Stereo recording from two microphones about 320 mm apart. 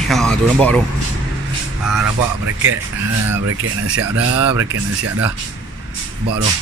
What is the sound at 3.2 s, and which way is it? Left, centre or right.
Speech, right.